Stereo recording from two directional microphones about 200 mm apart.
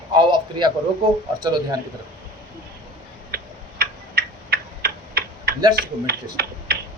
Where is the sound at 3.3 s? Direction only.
50° right (ahead or behind).